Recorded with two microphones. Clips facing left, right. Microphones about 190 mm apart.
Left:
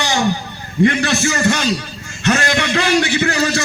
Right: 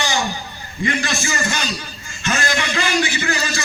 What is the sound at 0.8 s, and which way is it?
A man's voice, 65° left (ahead or behind).